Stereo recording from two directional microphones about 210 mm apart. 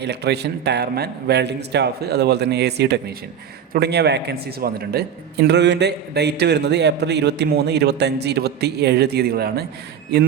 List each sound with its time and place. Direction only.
0.0 s a man's voice: 55° right (ahead or behind)